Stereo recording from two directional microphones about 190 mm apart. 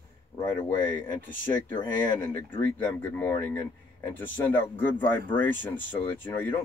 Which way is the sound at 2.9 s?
10° left (ahead or behind).